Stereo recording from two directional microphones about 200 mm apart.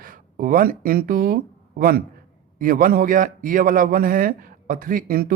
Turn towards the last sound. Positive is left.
turn(degrees=-45)  # may be behind; listen again after turning